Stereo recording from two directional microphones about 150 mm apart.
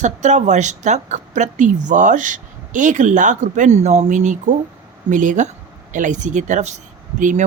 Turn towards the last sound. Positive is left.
turn(degrees=-60)  # may be behind; listen again after turning